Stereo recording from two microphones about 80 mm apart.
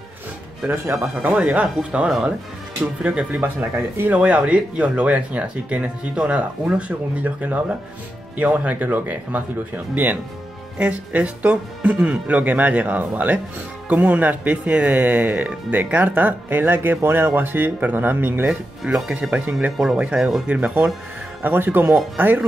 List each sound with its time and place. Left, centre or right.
1.0 s speech: centre
4.1 s speech: centre
10.8 s speech: centre
18.9 s speech: centre
20.4 s speech: centre